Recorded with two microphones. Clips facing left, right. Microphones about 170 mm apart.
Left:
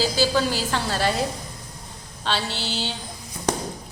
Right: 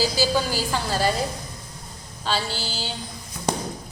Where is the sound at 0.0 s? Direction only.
5° right (ahead or behind).